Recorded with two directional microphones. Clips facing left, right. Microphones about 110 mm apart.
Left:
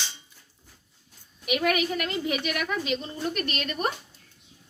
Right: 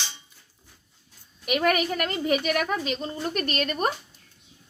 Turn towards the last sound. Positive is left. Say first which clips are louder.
# right 3 dB
turn(degrees=-40)  # may be behind; listen again after turning